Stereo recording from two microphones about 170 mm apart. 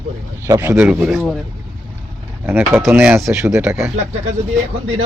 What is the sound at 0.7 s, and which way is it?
Speech, 5° right (ahead or behind).